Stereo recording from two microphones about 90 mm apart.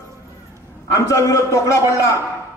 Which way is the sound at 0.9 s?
35° left (ahead or behind).